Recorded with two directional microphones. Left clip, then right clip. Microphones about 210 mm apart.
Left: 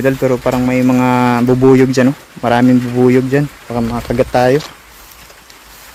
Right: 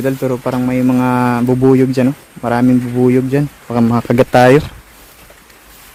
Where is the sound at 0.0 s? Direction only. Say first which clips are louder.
Left 4 dB; 5° left (ahead or behind).